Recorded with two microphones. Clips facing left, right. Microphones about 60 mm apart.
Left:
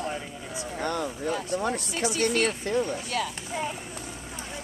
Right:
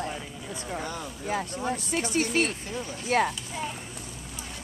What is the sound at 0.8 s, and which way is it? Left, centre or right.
Speech, left.